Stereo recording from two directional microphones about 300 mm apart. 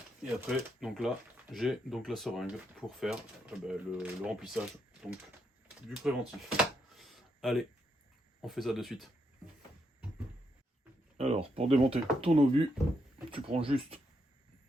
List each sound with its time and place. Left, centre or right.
0.2 s speech: centre
5.9 s speech: centre
6.9 s a sound: centre
8.4 s speech: centre
11.2 s speech: right